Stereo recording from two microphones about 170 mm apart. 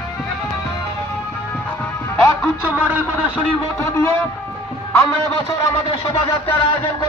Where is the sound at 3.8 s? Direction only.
15° left (ahead or behind).